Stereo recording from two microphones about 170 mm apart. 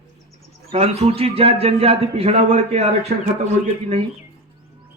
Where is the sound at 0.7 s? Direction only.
35° right (ahead or behind).